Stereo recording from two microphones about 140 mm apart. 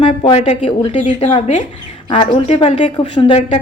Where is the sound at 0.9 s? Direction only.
55° left (ahead or behind).